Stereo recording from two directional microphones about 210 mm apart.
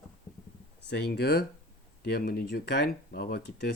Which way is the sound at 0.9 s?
50° left (ahead or behind).